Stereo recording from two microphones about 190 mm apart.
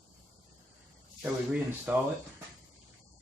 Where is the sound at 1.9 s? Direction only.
5° right (ahead or behind).